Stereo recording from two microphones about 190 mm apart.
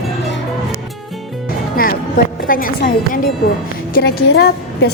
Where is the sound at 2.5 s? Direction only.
50° left (ahead or behind).